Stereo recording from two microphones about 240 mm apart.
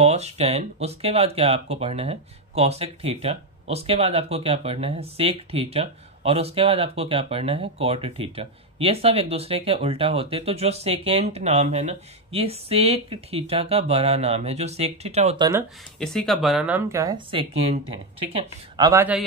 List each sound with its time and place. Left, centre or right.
0.0 s speech: right
16.0 s speech: centre